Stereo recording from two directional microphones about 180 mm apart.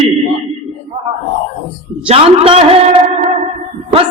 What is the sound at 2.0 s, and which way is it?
Speech, 35° right (ahead or behind).